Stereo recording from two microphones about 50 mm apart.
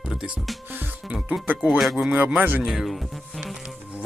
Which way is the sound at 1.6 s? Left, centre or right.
Centre.